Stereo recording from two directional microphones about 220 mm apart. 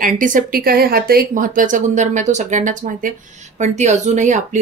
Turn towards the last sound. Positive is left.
turn(degrees=-35)  # may be behind; listen again after turning